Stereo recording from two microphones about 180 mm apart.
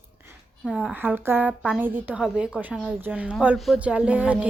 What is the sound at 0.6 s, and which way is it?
A woman's voice, centre (ahead or behind).